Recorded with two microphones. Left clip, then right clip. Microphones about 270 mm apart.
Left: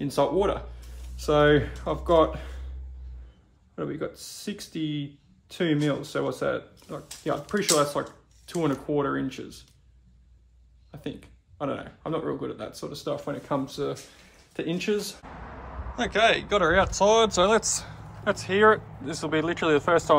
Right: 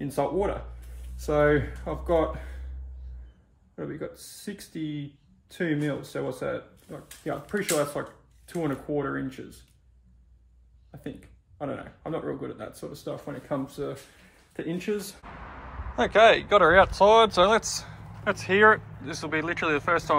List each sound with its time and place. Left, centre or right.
0.0 s speech: centre
1.5 s speech: centre
3.7 s speech: centre
10.9 s speech: centre
16.0 s speech: centre